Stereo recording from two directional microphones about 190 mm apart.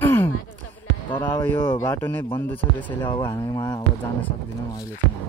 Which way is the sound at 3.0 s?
25° left (ahead or behind).